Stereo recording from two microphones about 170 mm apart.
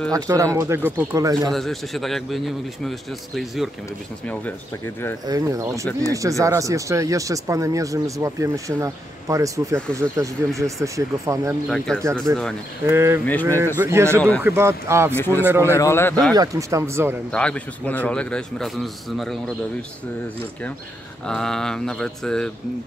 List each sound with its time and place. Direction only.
0.1 s speech: 20° right (ahead or behind)
1.5 s a man's voice: centre (ahead or behind)
4.3 s speech: 10° left (ahead or behind)
5.2 s speech: 20° right (ahead or behind)
11.7 s a man's voice: 5° left (ahead or behind)
12.3 s speech: 20° right (ahead or behind)
13.2 s speech: 10° left (ahead or behind)
13.7 s speech: 15° right (ahead or behind)
15.1 s speech: 15° left (ahead or behind)
15.4 s speech: 15° right (ahead or behind)
15.7 s speech: 15° left (ahead or behind)
16.3 s speech: 20° right (ahead or behind)
17.3 s a man's voice: 5° left (ahead or behind)
21.3 s a man's voice: 5° left (ahead or behind)